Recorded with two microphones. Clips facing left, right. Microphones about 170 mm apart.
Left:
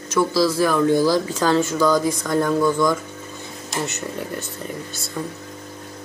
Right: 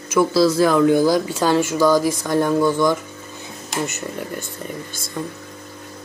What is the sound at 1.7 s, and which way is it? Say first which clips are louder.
Speech: right 2 dB; centre (ahead or behind).